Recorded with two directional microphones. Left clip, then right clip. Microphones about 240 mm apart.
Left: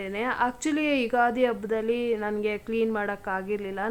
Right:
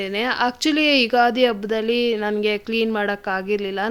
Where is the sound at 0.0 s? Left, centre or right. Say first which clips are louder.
Right 6 dB; right.